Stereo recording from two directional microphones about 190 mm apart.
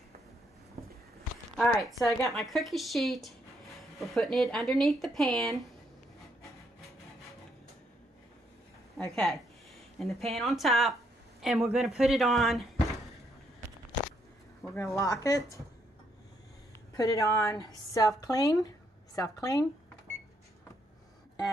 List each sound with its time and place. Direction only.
1.6 s speech: centre (ahead or behind)
9.1 s speech: centre (ahead or behind)
14.6 s speech: 5° left (ahead or behind)
15.0 s a woman's voice: 15° left (ahead or behind)
16.9 s a woman's voice: 15° left (ahead or behind)